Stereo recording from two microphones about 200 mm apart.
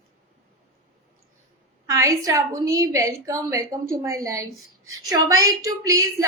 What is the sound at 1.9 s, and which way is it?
Speech, 15° right (ahead or behind).